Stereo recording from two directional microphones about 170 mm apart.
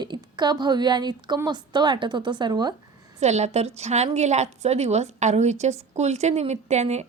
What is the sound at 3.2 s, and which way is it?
A woman's voice, 40° right (ahead or behind).